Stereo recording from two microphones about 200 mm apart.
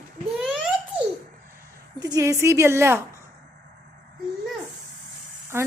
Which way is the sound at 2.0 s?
20° right (ahead or behind).